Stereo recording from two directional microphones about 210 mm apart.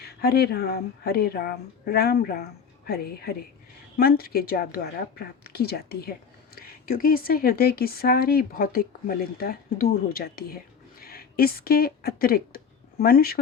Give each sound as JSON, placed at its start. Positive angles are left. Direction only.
{"t": 0.0, "sound": "speech", "side_deg": 50}